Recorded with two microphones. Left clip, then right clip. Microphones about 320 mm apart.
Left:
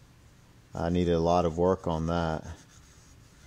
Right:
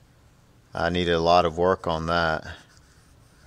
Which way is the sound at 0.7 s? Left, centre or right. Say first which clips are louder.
Right 5 dB; right.